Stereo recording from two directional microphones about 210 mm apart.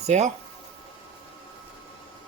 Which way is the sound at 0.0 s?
30° right (ahead or behind).